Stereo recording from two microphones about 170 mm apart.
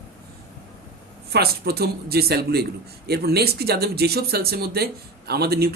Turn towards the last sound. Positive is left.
turn(degrees=-70)  # may be behind; listen again after turning